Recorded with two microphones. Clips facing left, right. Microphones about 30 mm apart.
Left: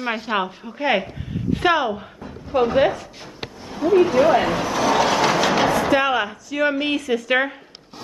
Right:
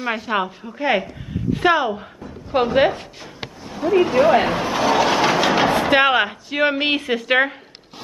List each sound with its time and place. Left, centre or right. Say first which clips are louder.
0.1 s a woman's voice: right 1 dB; centre
2.5 s speech: right 1 dB; right
3.8 s speech: even; centre
4.9 s train: right 1 dB; centre
5.7 s a sound: right 1 dB; right
5.9 s speech: right 4 dB; right